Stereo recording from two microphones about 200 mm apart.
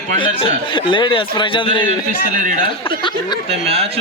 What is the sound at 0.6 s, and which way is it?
Speech, 25° left (ahead or behind).